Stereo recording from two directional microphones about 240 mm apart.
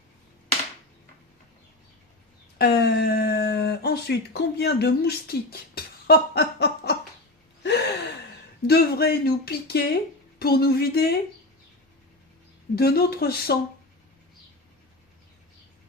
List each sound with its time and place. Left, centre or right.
2.6 s speech: left
7.6 s gasp: left
8.6 s speech: left
12.7 s speech: left